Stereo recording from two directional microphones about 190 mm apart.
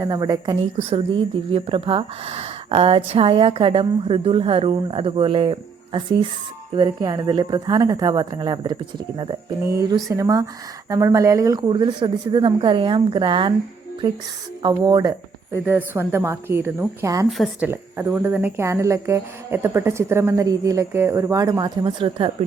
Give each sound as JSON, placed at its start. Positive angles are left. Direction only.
{"t": 0.0, "sound": "a woman's voice", "side_deg": -20}
{"t": 14.6, "sound": "a woman's voice", "side_deg": -20}
{"t": 17.2, "sound": "a woman's voice", "side_deg": 0}
{"t": 17.7, "sound": "speech", "side_deg": -10}